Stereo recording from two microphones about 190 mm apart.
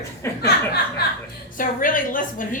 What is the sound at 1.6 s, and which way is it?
Speech, 45° left (ahead or behind).